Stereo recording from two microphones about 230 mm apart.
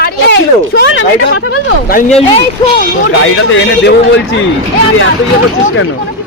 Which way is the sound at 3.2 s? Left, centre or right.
Left.